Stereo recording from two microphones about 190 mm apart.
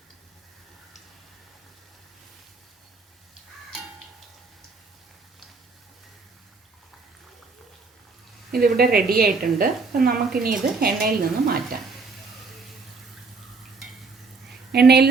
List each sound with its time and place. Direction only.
8.5 s a woman's voice: 50° right (ahead or behind)
14.7 s a woman's voice: 60° right (ahead or behind)